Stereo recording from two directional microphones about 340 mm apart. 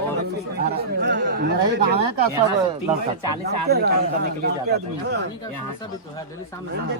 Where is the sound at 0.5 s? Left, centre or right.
Right.